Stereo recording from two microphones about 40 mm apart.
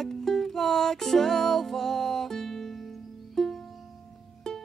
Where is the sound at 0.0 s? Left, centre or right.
Centre.